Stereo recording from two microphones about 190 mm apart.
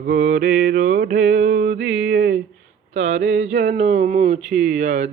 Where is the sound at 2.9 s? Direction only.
40° right (ahead or behind).